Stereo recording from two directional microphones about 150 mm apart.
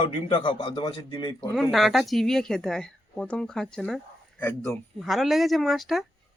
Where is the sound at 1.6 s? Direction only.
Centre (ahead or behind).